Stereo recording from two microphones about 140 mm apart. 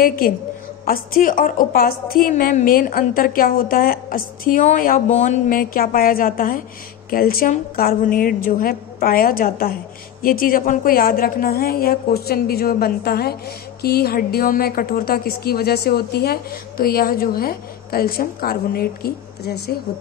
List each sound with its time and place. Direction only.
0.0 s a woman's voice: 90° left
5.1 s a woman's voice: 55° left (ahead or behind)
5.5 s a woman's voice: 90° left
10.6 s a woman's voice: 80° left